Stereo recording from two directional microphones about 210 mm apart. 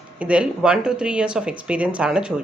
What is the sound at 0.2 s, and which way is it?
Speech, 5° right (ahead or behind).